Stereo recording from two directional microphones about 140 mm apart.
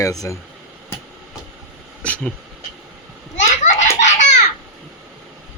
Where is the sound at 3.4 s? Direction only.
60° left (ahead or behind).